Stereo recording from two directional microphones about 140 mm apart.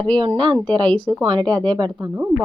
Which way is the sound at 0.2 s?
35° right (ahead or behind).